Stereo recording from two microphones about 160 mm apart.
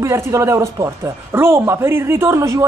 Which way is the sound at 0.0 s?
20° right (ahead or behind).